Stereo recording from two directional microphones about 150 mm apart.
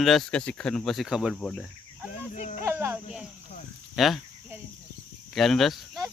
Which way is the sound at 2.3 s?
50° left (ahead or behind).